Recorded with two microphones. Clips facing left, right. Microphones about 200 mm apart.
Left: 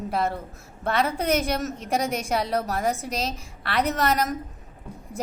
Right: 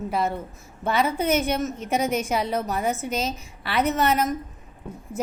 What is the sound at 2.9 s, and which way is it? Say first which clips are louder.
Speech: right 1 dB; 30° left (ahead or behind).